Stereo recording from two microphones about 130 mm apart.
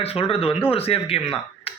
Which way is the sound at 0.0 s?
50° left (ahead or behind).